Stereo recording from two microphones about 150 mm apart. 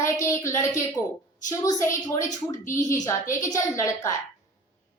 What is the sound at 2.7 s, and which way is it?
Speech, 60° left (ahead or behind).